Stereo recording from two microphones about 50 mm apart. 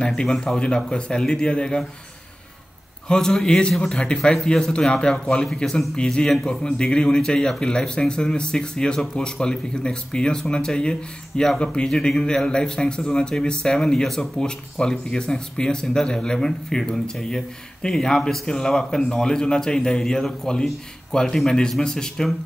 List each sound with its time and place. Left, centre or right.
0.0 s a man's voice: centre
3.1 s a man's voice: centre
14.0 s speech: centre
14.4 s speech: centre